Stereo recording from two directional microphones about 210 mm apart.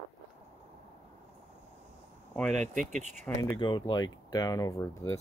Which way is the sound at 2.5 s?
35° right (ahead or behind).